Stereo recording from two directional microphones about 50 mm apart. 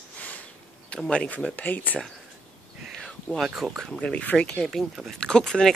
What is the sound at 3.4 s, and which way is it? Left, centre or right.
Speech, centre.